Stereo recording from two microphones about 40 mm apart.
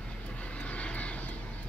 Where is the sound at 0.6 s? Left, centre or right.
Left.